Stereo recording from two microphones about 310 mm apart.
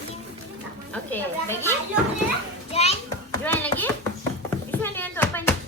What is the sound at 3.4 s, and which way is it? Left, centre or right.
Speech, centre.